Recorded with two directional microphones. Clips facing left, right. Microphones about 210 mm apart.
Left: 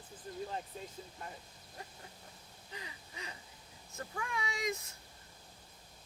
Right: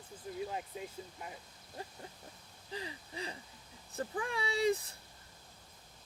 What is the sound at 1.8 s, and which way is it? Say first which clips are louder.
Speech: right 5 dB; 30° right (ahead or behind).